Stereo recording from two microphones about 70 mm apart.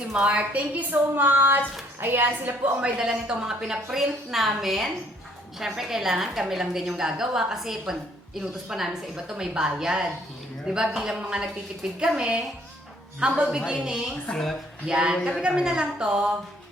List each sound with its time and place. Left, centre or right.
0.1 s a woman's voice: centre; by 2.6 s right
2.8 s a woman's voice: centre
14.3 s a woman's voice: centre
14.8 s a woman's voice: centre